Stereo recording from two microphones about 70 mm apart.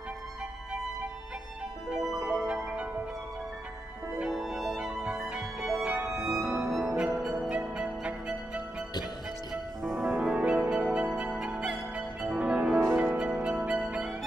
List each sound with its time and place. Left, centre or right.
1.9 s music: centre
4.3 s music: centre
9.9 s music: right
10.2 s music: centre